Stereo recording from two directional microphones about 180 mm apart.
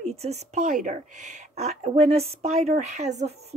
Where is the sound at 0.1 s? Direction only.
35° right (ahead or behind).